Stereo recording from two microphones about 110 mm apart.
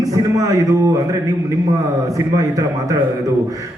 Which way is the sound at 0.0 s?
35° right (ahead or behind).